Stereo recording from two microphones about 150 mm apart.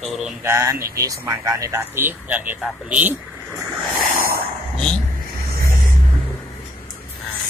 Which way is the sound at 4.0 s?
75° right (ahead or behind).